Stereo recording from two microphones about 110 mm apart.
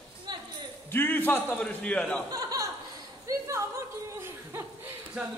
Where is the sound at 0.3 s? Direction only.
40° right (ahead or behind).